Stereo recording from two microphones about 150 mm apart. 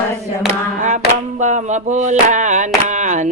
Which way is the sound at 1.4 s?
55° right (ahead or behind).